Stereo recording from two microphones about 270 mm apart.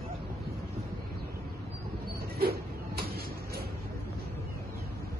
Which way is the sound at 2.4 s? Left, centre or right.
Right.